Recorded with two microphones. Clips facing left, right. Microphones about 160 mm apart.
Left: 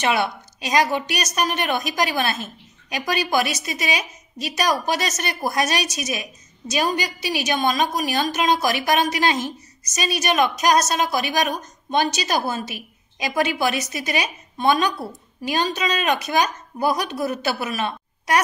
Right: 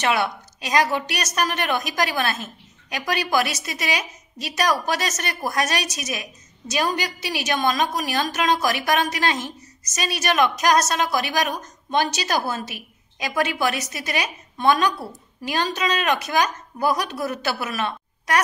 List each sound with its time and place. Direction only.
0.0 s a woman's voice: 20° left (ahead or behind)
4.5 s a woman's voice: 20° left (ahead or behind)